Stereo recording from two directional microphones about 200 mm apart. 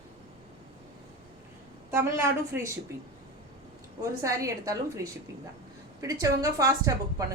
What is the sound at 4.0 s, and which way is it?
A woman's voice, 15° right (ahead or behind).